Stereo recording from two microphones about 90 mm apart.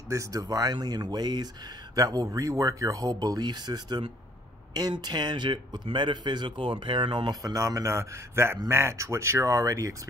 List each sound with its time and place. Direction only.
0.1 s speech: 35° right (ahead or behind); by 7.3 s 70° right (ahead or behind)
7.4 s speech: 35° right (ahead or behind)